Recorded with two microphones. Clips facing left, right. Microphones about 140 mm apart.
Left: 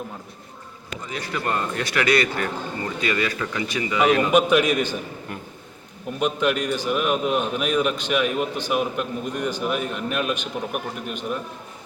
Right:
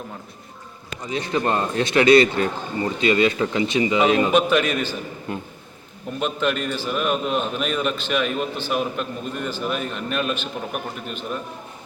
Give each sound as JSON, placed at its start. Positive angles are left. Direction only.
{"t": 1.0, "sound": "a man's voice", "side_deg": -20}
{"t": 4.3, "sound": "a man's voice", "side_deg": 10}
{"t": 5.3, "sound": "a man's voice", "side_deg": -25}
{"t": 6.1, "sound": "a man's voice", "side_deg": 10}